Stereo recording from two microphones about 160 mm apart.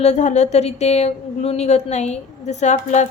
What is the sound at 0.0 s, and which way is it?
A woman's voice, 45° left (ahead or behind).